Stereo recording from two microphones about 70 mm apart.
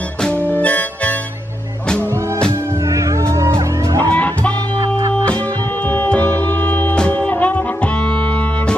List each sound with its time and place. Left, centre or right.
0.2 s music: left
2.8 s music: right
4.1 s music: centre